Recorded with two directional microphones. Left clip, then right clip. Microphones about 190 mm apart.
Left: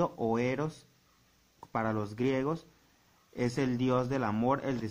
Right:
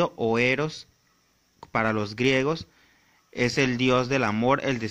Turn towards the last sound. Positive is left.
turn(degrees=-30)  # may be behind; listen again after turning